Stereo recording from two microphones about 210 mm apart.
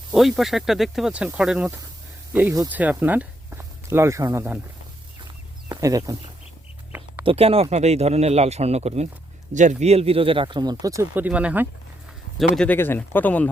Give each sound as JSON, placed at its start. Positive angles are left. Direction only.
{"t": 0.1, "sound": "speech", "side_deg": 0}
{"t": 5.6, "sound": "speech", "side_deg": -15}
{"t": 7.3, "sound": "speech", "side_deg": -30}
{"t": 12.4, "sound": "speech", "side_deg": 5}